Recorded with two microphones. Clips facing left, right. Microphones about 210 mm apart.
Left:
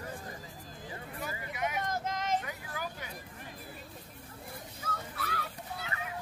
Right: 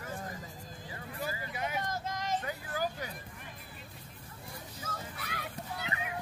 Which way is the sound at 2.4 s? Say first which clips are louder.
Right 5 dB; 35° right (ahead or behind).